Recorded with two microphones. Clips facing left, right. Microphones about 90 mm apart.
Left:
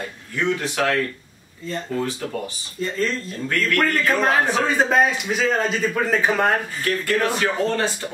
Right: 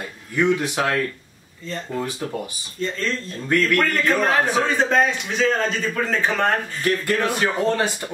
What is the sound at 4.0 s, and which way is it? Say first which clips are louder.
A man's voice: even; 5° left (ahead or behind).